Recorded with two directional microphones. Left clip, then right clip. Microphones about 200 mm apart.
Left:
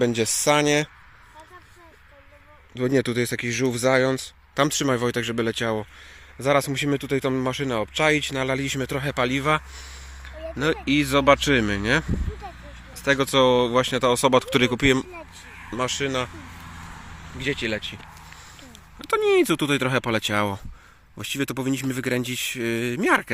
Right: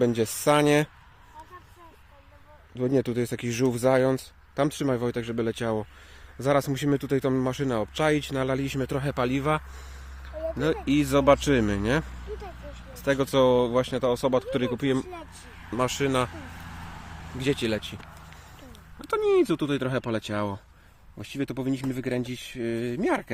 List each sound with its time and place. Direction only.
0.0 s speech: centre (ahead or behind)
2.7 s speech: centre (ahead or behind)
10.2 s a sound: centre (ahead or behind)
10.8 s speech: 5° right (ahead or behind); by 15.0 s 10° left (ahead or behind)
15.7 s speech: 15° right (ahead or behind)
17.4 s speech: 30° right (ahead or behind)
18.9 s speech: centre (ahead or behind)